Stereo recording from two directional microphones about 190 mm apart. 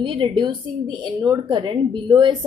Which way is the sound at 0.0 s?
25° right (ahead or behind).